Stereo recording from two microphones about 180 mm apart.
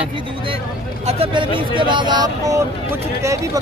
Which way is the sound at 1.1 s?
30° right (ahead or behind).